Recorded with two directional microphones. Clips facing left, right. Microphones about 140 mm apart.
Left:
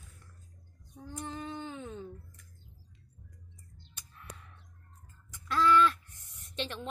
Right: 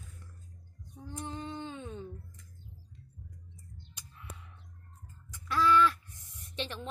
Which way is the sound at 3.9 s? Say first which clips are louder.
Left 1 dB; 10° right (ahead or behind).